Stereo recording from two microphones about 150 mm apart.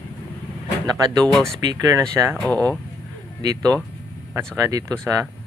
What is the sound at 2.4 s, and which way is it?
Speech, 10° left (ahead or behind).